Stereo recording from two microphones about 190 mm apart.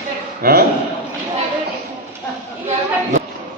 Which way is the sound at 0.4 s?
55° right (ahead or behind).